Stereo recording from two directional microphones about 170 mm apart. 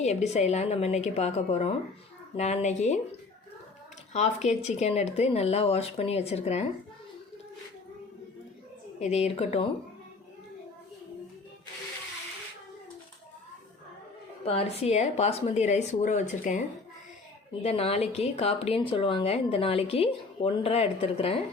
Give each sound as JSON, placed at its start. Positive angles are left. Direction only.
{"t": 0.0, "sound": "speech", "side_deg": 40}
{"t": 4.1, "sound": "speech", "side_deg": 40}
{"t": 9.0, "sound": "speech", "side_deg": 40}
{"t": 14.4, "sound": "speech", "side_deg": 35}
{"t": 17.6, "sound": "speech", "side_deg": 35}